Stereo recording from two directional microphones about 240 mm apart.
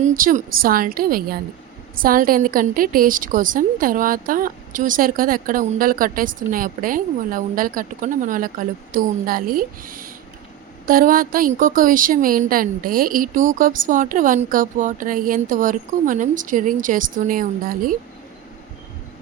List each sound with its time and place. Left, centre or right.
0.0 s a woman's voice: right